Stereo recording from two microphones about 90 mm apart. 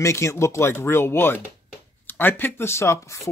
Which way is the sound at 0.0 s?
30° left (ahead or behind).